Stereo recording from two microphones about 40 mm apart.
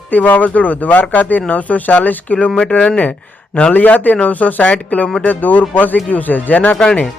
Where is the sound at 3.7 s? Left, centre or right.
Left.